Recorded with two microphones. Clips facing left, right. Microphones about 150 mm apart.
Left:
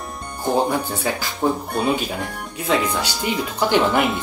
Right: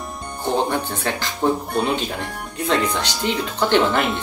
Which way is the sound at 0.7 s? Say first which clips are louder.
Left 1 dB; 5° left (ahead or behind).